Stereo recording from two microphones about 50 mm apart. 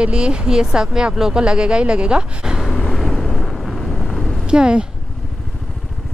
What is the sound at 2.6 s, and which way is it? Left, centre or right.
Vehicle, centre.